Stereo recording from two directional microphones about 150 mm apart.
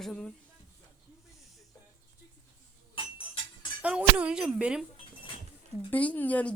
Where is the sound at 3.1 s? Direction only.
30° left (ahead or behind).